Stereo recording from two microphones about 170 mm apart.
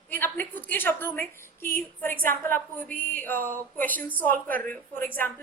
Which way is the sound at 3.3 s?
55° right (ahead or behind).